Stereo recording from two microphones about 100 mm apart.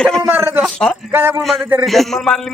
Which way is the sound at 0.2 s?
25° right (ahead or behind).